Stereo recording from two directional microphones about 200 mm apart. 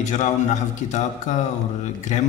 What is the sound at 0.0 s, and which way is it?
A man's voice, 35° left (ahead or behind).